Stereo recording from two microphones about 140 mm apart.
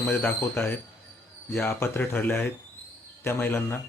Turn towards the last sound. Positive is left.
turn(degrees=15)  # may be behind; listen again after turning